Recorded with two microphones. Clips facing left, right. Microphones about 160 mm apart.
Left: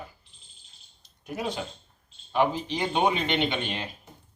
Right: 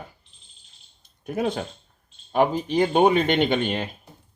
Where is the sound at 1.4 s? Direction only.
50° right (ahead or behind).